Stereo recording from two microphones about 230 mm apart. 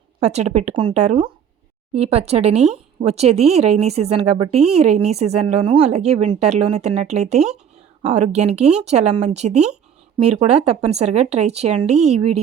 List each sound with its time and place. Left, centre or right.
0.2 s speech: right